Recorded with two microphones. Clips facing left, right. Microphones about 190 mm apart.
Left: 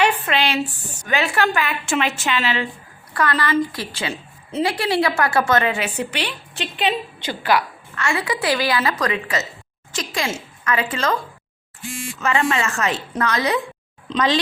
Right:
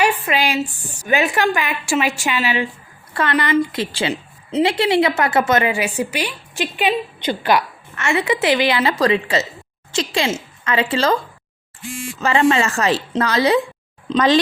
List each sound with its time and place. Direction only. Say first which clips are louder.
0.0 s a woman's voice: right 1 dB; 10° right (ahead or behind)
3.1 s a woman's voice: right 2 dB; 25° right (ahead or behind)
12.2 s a woman's voice: right 5 dB; 30° right (ahead or behind)
14.1 s speech: right 4 dB; 45° right (ahead or behind)